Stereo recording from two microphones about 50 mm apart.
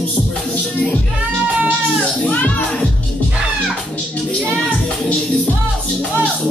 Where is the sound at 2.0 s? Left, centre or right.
Left.